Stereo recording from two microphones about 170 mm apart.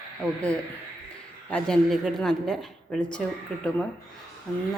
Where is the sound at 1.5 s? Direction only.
5° left (ahead or behind).